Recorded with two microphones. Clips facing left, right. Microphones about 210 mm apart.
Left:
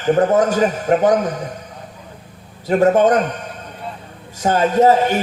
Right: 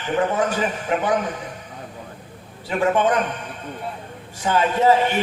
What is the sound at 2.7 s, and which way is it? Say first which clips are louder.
Speech: left 6 dB; 40° left (ahead or behind).